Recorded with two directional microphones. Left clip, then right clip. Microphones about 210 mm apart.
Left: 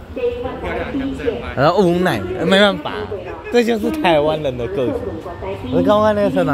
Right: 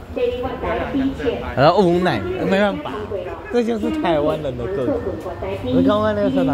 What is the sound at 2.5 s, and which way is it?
A man's voice, 15° left (ahead or behind).